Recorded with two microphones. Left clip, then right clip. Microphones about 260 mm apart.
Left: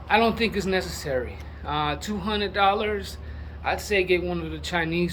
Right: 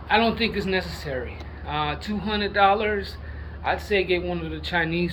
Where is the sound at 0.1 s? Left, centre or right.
Centre.